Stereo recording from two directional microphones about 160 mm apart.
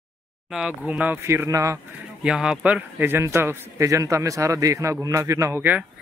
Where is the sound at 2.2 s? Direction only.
5° right (ahead or behind).